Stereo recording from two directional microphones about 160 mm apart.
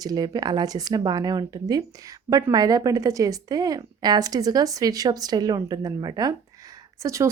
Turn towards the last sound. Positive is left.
turn(degrees=-20)  # may be behind; listen again after turning